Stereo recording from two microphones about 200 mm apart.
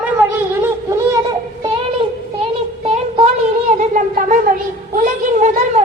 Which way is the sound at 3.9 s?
40° right (ahead or behind).